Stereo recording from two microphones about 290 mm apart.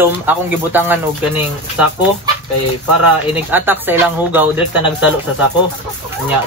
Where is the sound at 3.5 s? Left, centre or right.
Centre.